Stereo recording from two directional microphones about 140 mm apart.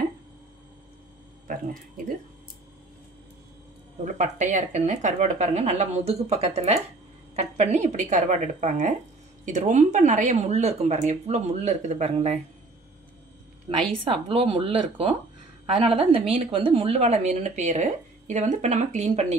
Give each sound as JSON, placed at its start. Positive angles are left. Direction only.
{"t": 4.0, "sound": "a woman's voice", "side_deg": -60}
{"t": 13.7, "sound": "speech", "side_deg": -40}